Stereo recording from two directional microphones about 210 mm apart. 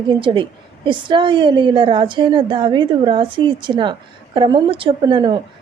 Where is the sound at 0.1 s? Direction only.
20° right (ahead or behind).